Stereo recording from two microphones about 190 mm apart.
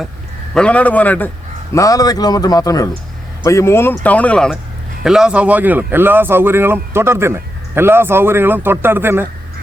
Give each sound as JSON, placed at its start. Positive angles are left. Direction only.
{"t": 0.5, "sound": "a man's voice", "side_deg": 5}